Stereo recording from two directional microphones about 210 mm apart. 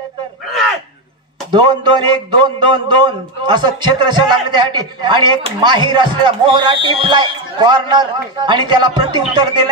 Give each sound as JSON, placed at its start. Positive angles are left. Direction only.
{"t": 1.5, "sound": "a man's voice", "side_deg": -20}